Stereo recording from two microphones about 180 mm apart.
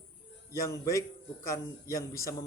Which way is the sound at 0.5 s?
15° left (ahead or behind).